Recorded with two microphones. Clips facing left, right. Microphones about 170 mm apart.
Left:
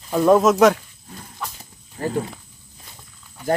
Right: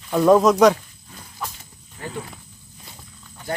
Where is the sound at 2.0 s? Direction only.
40° left (ahead or behind).